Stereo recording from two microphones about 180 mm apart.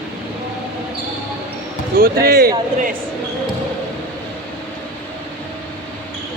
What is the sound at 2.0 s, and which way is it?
Speech, 60° right (ahead or behind).